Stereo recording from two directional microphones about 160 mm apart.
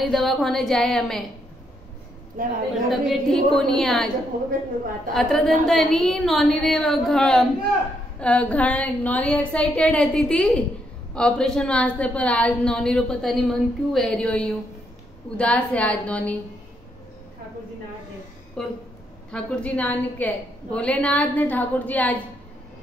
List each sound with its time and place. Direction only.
0.0 s a woman's voice: centre (ahead or behind)
2.4 s a woman's voice: 60° right (ahead or behind)
2.9 s a woman's voice: centre (ahead or behind)
5.1 s a woman's voice: centre (ahead or behind)
18.6 s a woman's voice: 5° left (ahead or behind)